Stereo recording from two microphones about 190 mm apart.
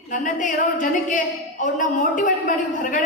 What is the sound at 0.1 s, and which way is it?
A woman's voice, 40° left (ahead or behind).